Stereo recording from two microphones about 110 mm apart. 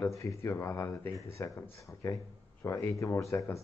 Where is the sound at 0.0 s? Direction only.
25° left (ahead or behind).